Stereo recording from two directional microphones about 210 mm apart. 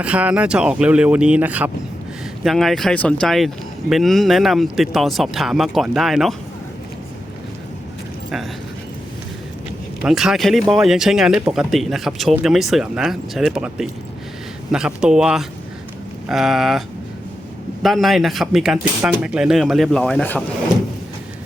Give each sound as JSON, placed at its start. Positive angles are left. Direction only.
{"t": 0.0, "sound": "speech", "side_deg": -5}
{"t": 10.0, "sound": "speech", "side_deg": 0}
{"t": 17.8, "sound": "speech", "side_deg": 0}